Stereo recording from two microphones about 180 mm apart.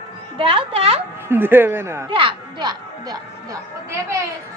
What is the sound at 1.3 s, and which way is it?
Speech, 10° right (ahead or behind).